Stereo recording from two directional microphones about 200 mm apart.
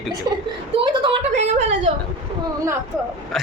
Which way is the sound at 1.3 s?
35° right (ahead or behind).